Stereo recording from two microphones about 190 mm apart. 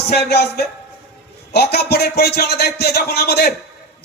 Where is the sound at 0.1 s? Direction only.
60° left (ahead or behind).